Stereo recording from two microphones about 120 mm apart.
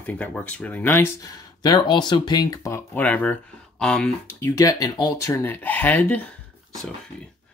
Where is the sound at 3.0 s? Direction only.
15° left (ahead or behind).